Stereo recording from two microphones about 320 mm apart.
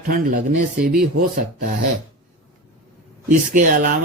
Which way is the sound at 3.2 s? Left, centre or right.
Right.